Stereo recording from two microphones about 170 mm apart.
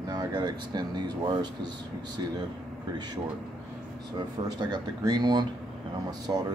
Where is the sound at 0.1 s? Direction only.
25° right (ahead or behind).